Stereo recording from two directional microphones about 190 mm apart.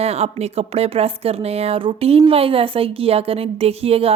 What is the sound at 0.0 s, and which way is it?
A woman's voice, 35° right (ahead or behind).